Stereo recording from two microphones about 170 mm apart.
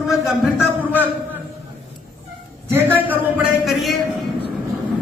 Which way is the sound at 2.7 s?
10° right (ahead or behind).